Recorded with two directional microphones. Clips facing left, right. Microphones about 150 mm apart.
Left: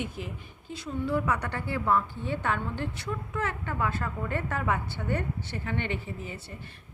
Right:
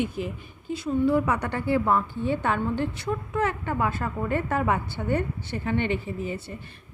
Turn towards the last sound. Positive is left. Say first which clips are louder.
# right 7 dB
turn(degrees=-20)  # may be behind; listen again after turning